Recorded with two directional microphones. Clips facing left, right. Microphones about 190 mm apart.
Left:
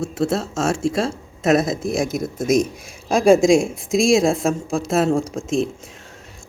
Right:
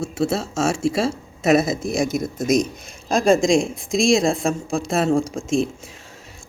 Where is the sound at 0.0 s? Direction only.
Centre (ahead or behind).